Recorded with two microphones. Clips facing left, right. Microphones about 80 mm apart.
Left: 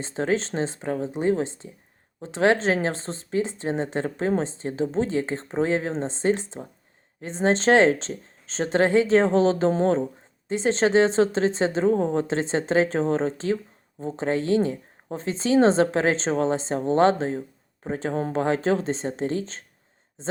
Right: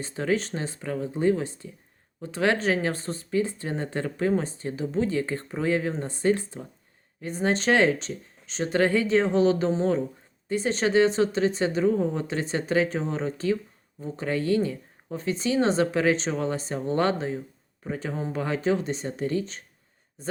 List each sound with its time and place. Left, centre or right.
0.0 s speech: left
9.6 s speech: left
10.5 s speech: left
11.9 s speech: left
12.3 s speech: left
18.1 s speech: left
18.3 s speech: left